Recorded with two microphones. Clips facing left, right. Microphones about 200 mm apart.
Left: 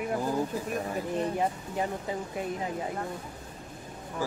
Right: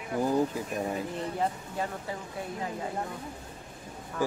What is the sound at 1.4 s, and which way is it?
Speech, 20° left (ahead or behind).